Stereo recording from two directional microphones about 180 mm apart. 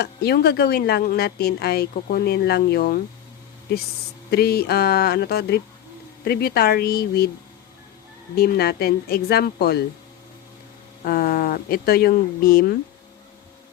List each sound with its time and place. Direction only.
0.0 s speech: 60° left (ahead or behind)
4.3 s speech: 60° left (ahead or behind)
8.4 s speech: 60° left (ahead or behind)
11.0 s speech: 55° left (ahead or behind)